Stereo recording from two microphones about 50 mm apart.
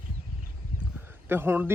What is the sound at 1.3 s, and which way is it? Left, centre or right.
Speech, right.